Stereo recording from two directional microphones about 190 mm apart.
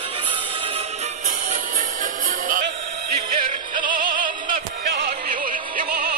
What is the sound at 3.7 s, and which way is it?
Music, 25° right (ahead or behind).